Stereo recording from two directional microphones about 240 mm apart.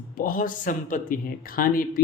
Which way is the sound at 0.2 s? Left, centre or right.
Left.